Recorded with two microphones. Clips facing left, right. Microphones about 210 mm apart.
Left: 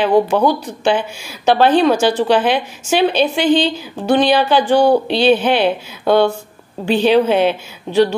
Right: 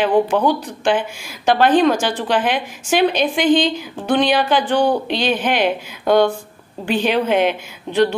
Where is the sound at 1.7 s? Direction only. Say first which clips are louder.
Left 2 dB; 15° right (ahead or behind).